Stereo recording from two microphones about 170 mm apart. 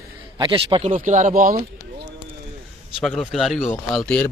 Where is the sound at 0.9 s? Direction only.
50° right (ahead or behind).